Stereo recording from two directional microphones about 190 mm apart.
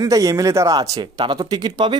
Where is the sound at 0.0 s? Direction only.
20° right (ahead or behind).